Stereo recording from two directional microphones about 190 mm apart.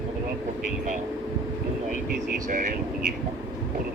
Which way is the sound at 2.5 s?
45° right (ahead or behind).